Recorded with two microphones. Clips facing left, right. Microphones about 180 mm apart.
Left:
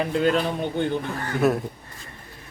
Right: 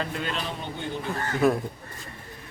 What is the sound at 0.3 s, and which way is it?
Speech, 55° left (ahead or behind).